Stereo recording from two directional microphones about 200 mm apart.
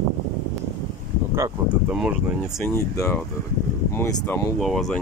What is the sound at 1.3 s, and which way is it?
Speech, 15° right (ahead or behind).